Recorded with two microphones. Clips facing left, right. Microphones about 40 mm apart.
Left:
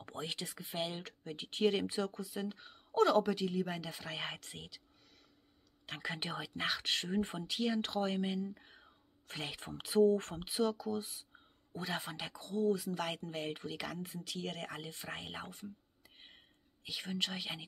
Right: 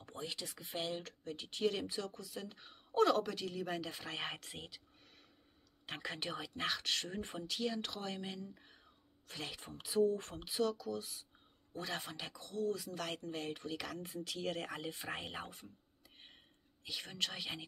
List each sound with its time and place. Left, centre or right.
0.0 s a sound: left
0.5 s speech: centre
0.9 s speech: left
2.3 s speech: centre
2.6 s speech: centre
5.9 s speech: centre
6.1 s speech: centre
7.8 s speech: left
9.6 s speech: left
10.5 s speech: centre
11.7 s speech: centre
12.7 s speech: centre